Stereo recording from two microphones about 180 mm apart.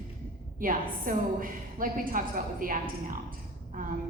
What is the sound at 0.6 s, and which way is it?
A woman's voice, 50° right (ahead or behind).